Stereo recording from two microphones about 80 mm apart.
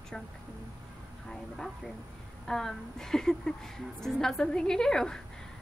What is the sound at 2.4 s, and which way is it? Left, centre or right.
A woman's voice, centre.